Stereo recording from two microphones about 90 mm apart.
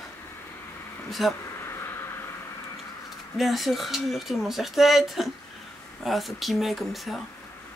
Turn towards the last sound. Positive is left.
turn(degrees=0)  # may be behind; listen again after turning